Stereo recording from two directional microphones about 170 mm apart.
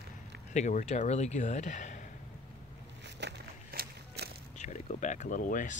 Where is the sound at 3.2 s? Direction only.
70° right (ahead or behind).